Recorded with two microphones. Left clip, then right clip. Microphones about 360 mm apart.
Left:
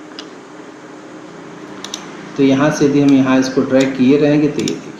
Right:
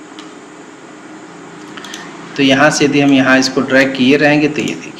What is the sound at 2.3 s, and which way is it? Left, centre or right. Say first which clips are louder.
Speech: right 3 dB; right.